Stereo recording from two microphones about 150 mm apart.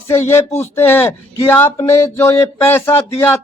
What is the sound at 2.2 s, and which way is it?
Speech, 15° left (ahead or behind).